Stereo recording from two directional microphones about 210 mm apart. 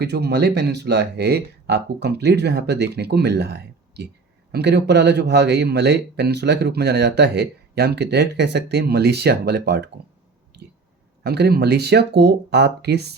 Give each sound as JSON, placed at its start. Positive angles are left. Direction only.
{"t": 0.0, "sound": "speech", "side_deg": -50}
{"t": 10.5, "sound": "a sound", "side_deg": -50}
{"t": 11.2, "sound": "speech", "side_deg": -50}